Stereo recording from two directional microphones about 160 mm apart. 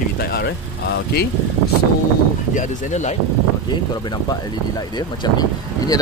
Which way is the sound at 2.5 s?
50° left (ahead or behind).